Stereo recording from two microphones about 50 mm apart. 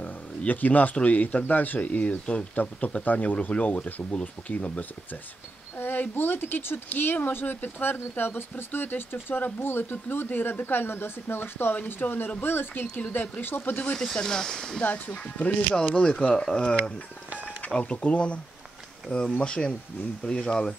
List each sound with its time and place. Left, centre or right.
0.5 s speech: left
5.8 s speech: left
11.7 s speech: left
13.9 s speech: centre
14.8 s speech: left
17.7 s speech: left